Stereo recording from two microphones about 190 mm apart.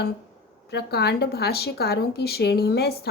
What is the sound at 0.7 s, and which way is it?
A woman's voice, 60° left (ahead or behind).